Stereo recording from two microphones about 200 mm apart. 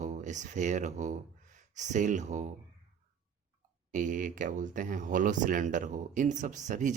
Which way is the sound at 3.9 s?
40° right (ahead or behind).